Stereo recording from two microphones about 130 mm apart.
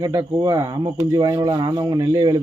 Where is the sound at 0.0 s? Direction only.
30° right (ahead or behind).